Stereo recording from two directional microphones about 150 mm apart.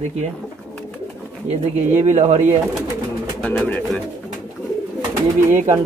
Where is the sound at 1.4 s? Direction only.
50° right (ahead or behind).